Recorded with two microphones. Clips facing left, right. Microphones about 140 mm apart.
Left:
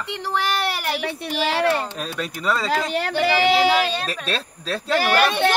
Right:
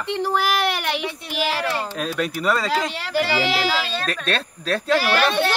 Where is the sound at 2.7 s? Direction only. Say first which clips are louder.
Left 2 dB; 50° left (ahead or behind).